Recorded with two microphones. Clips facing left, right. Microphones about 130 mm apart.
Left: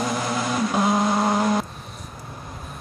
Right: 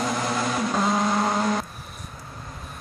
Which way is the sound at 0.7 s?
10° left (ahead or behind).